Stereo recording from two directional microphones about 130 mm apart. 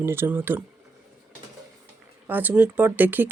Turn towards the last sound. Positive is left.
turn(degrees=-15)  # may be behind; listen again after turning